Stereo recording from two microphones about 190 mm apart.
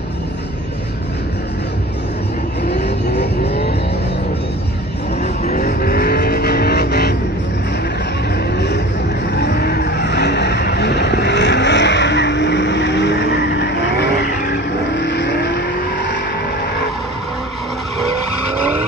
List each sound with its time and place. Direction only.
2.7 s vehicle: 60° left (ahead or behind)
5.2 s vehicle: 40° left (ahead or behind); by 7.2 s 60° left (ahead or behind)
8.5 s vehicle: 60° left (ahead or behind)